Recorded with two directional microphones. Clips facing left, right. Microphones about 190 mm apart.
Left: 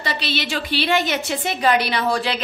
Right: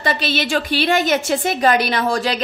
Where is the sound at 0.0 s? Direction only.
50° right (ahead or behind).